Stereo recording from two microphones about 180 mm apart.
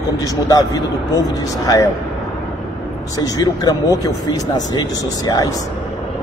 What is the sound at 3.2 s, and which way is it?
Speech, 20° left (ahead or behind).